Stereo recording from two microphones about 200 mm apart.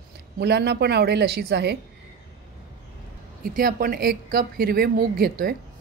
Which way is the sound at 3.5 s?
45° right (ahead or behind).